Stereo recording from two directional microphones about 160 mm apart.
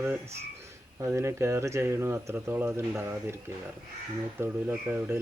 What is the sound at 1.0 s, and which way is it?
Speech, 15° right (ahead or behind).